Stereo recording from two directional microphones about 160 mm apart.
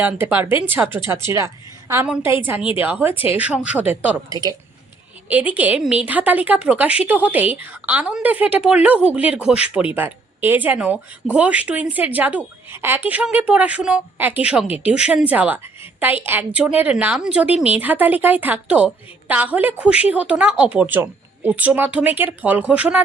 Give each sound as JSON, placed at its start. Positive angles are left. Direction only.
{"t": 0.0, "sound": "a woman's voice", "side_deg": -10}
{"t": 4.3, "sound": "a woman's voice", "side_deg": -25}
{"t": 5.3, "sound": "a woman's voice", "side_deg": -10}